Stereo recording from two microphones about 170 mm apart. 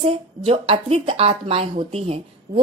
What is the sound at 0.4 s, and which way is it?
Speech, 35° right (ahead or behind).